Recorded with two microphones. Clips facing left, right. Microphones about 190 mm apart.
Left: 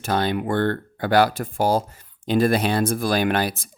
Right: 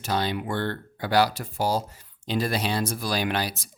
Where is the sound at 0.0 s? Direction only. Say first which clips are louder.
Left 5 dB; 55° left (ahead or behind).